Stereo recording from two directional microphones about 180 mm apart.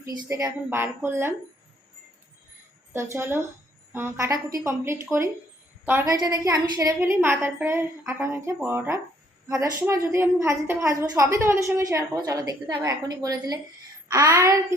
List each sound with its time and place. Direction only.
0.3 s a woman's voice: 20° right (ahead or behind)
2.9 s a woman's voice: 15° right (ahead or behind)